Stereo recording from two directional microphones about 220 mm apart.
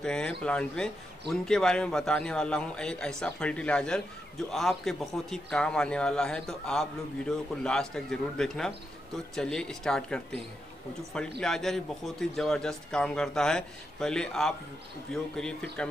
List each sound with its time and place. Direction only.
0.0 s a man's voice: 5° left (ahead or behind)